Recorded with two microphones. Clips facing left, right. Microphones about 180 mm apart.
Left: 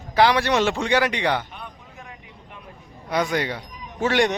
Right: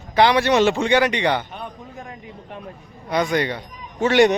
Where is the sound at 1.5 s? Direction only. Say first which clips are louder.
Right 6 dB; 35° right (ahead or behind).